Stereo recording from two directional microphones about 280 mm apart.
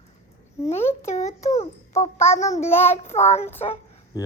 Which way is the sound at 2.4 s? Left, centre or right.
Left.